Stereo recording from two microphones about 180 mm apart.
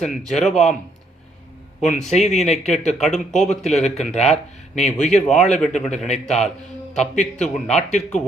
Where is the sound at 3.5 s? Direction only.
40° left (ahead or behind).